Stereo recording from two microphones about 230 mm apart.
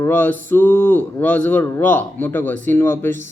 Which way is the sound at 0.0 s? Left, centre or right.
Centre.